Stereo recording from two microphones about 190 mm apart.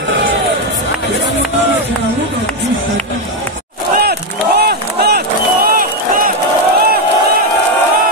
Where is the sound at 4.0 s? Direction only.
55° right (ahead or behind).